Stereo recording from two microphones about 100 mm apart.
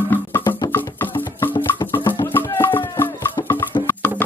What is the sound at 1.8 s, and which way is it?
Music, 40° left (ahead or behind).